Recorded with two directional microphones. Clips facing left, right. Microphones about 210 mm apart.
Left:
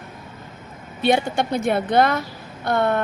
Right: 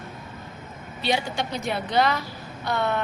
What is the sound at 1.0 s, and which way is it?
A woman's voice, 55° left (ahead or behind).